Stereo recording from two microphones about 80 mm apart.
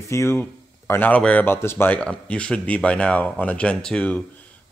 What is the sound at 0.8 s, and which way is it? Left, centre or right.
Speech, left.